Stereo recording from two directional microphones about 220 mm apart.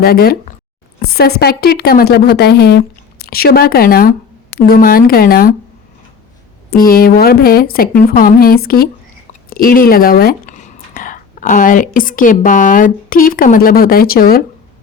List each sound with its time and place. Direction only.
0.0 s a woman's voice: 45° left (ahead or behind)
6.7 s a woman's voice: 40° left (ahead or behind)